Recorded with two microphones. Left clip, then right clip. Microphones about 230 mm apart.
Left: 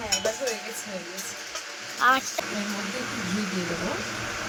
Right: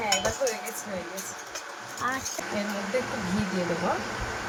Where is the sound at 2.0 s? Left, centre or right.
Centre.